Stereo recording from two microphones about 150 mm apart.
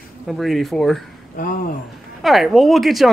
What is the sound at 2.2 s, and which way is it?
Speech, centre (ahead or behind).